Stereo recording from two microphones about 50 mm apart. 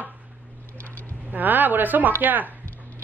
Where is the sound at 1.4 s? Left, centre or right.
Right.